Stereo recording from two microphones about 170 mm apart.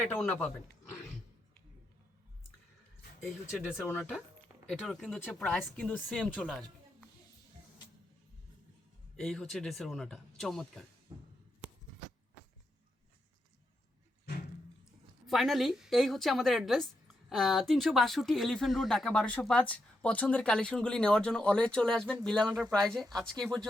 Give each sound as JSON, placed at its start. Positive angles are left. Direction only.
{"t": 0.0, "sound": "speech", "side_deg": 5}
{"t": 3.2, "sound": "speech", "side_deg": -5}
{"t": 9.1, "sound": "speech", "side_deg": 5}
{"t": 11.1, "sound": "a sound", "side_deg": -30}
{"t": 15.3, "sound": "speech", "side_deg": 0}